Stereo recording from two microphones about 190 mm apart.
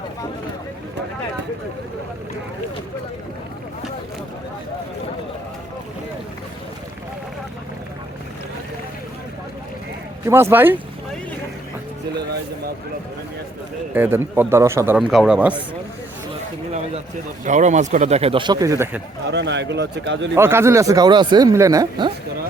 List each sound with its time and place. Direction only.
10.2 s a man's voice: 15° right (ahead or behind)
13.9 s a man's voice: 10° right (ahead or behind)
14.9 s a man's voice: centre (ahead or behind)
17.4 s speech: 40° right (ahead or behind); by 19.0 s 15° right (ahead or behind)
19.3 s a man's voice: 65° right (ahead or behind)
20.3 s speech: 15° right (ahead or behind)